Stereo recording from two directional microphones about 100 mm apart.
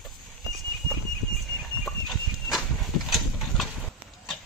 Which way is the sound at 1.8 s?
5° left (ahead or behind).